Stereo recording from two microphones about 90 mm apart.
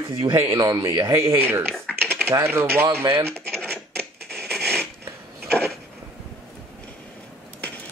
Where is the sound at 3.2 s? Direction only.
15° left (ahead or behind).